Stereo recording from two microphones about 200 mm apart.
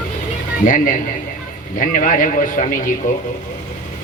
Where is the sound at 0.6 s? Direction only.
40° left (ahead or behind).